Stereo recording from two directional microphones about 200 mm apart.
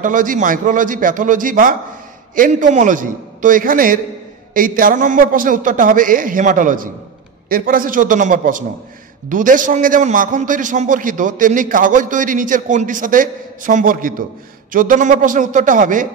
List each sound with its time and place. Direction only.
0.0 s a man's voice: 40° right (ahead or behind)